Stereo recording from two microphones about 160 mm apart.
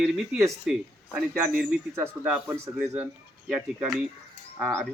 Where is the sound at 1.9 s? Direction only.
15° right (ahead or behind).